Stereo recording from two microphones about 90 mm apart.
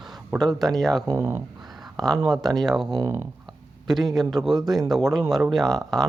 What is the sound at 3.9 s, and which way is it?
Speech, centre (ahead or behind).